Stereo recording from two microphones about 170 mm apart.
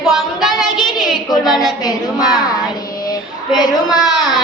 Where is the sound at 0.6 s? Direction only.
Centre (ahead or behind).